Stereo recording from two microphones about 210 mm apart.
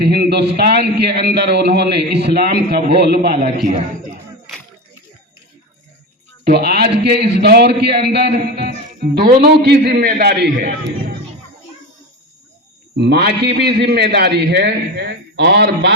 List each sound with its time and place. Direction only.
0.0 s a man's voice: 50° right (ahead or behind)
6.4 s a man's voice: 50° right (ahead or behind)
13.0 s a man's voice: 50° right (ahead or behind)